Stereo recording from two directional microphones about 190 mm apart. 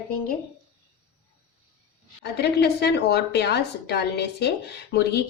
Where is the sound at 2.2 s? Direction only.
60° left (ahead or behind).